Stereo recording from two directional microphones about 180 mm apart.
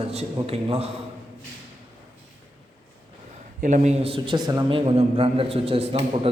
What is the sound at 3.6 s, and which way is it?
A man's voice, 40° right (ahead or behind).